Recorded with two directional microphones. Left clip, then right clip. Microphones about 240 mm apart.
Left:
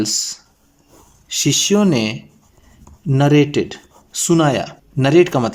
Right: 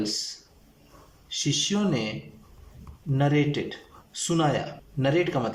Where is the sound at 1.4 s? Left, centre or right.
Left.